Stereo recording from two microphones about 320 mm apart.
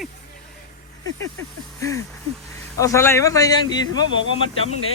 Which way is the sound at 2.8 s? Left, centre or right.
Centre.